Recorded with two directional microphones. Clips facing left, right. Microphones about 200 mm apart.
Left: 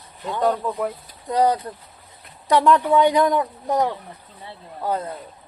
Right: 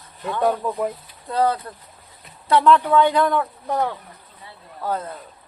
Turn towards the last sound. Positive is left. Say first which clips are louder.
# left 1 dB
turn(degrees=15)  # may be behind; listen again after turning